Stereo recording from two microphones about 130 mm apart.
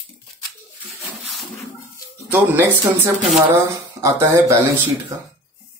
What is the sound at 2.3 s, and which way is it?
A man's voice, 15° right (ahead or behind).